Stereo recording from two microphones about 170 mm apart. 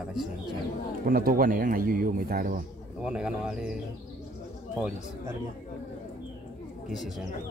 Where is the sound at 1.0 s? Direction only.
55° right (ahead or behind).